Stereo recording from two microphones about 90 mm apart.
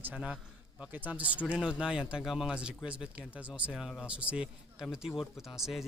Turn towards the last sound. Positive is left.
turn(degrees=-5)  # may be behind; listen again after turning